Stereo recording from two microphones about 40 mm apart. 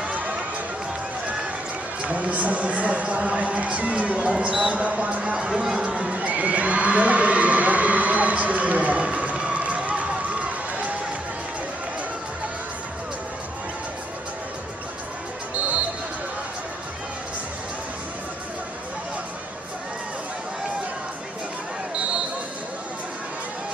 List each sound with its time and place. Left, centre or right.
2.0 s speech: right
4.3 s speech: centre
5.5 s speech: centre
6.1 s a sound: right